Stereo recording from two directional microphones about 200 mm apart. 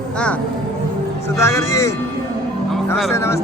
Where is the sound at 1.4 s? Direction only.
15° left (ahead or behind).